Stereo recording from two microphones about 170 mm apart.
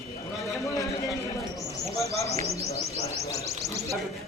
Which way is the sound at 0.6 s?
20° left (ahead or behind).